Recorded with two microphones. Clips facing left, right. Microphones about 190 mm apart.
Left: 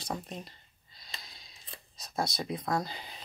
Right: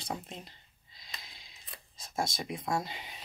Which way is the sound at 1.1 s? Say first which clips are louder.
Left 1 dB; 30° left (ahead or behind).